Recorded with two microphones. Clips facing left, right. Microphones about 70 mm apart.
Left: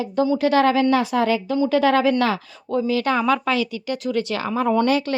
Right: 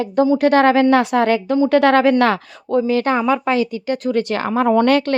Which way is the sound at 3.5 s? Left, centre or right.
Right.